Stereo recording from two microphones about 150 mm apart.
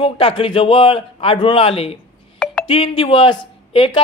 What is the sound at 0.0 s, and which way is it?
Speech, 35° left (ahead or behind).